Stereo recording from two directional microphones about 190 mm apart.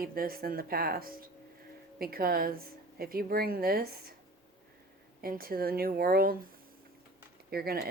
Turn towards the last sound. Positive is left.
turn(degrees=-55)  # may be behind; listen again after turning